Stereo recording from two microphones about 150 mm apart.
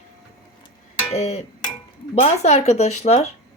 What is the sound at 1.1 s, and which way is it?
Speech, 45° left (ahead or behind).